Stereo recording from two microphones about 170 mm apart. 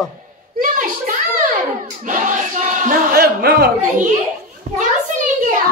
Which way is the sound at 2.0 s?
50° right (ahead or behind).